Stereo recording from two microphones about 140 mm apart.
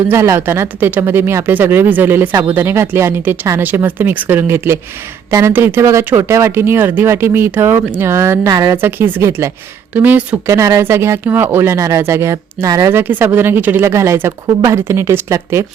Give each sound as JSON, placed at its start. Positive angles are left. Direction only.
{"t": 0.1, "sound": "speech", "side_deg": -20}